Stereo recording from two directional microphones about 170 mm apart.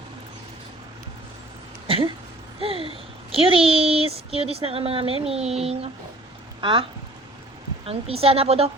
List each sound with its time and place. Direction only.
2.6 s a sound: 35° right (ahead or behind)
3.3 s speech: 35° right (ahead or behind)
7.9 s speech: 35° right (ahead or behind)